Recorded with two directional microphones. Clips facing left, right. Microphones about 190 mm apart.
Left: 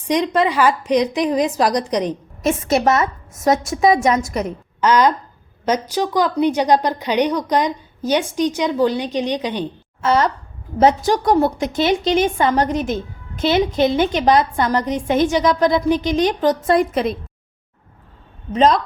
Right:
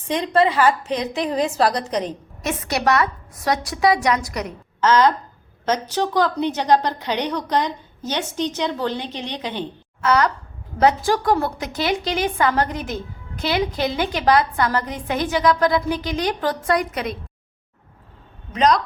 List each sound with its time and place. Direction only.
0.1 s a woman's voice: 15° left (ahead or behind)
4.8 s a woman's voice: 15° left (ahead or behind)
18.5 s a woman's voice: 25° left (ahead or behind)